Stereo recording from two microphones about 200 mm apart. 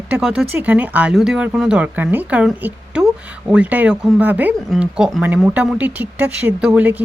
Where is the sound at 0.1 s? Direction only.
5° right (ahead or behind).